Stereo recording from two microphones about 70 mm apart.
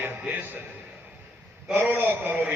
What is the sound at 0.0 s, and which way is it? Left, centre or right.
Music, right.